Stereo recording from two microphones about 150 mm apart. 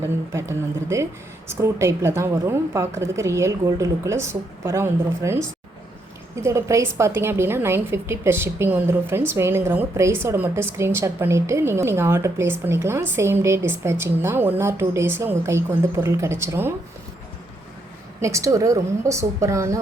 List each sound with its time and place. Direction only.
0.3 s a woman's voice: 20° right (ahead or behind)
18.2 s a woman's voice: 20° right (ahead or behind)